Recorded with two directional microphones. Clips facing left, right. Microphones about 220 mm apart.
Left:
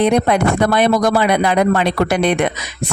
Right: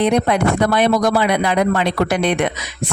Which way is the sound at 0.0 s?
50° left (ahead or behind).